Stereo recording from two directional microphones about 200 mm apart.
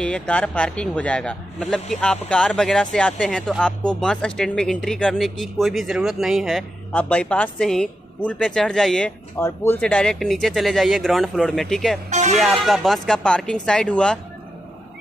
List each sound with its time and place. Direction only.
0.0 s a man's voice: 5° left (ahead or behind)
12.1 s speech: 35° right (ahead or behind)
12.4 s a man's voice: centre (ahead or behind)